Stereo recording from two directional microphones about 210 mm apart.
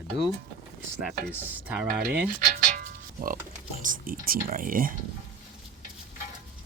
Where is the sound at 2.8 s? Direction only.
40° right (ahead or behind).